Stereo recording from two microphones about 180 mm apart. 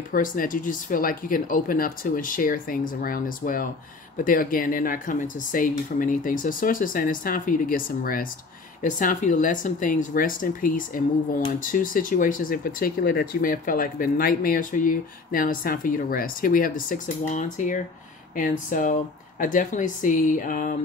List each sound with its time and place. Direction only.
0.1 s speech: 50° left (ahead or behind)